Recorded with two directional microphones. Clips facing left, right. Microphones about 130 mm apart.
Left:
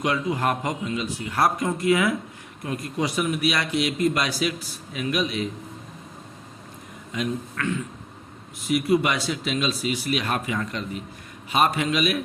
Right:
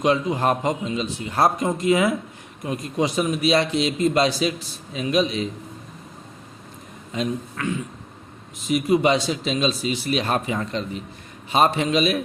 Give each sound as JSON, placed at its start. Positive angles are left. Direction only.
{"t": 0.0, "sound": "speech", "side_deg": -25}
{"t": 7.1, "sound": "speech", "side_deg": -25}
{"t": 8.6, "sound": "speech", "side_deg": -20}